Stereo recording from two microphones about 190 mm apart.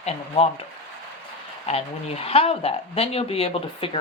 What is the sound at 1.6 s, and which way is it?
Speech, 30° left (ahead or behind).